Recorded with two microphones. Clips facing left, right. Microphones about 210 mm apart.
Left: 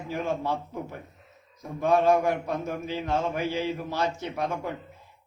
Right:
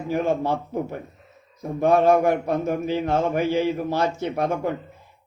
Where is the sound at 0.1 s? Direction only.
50° right (ahead or behind).